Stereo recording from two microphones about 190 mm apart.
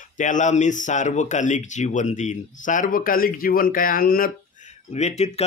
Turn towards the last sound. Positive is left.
turn(degrees=35)  # may be behind; listen again after turning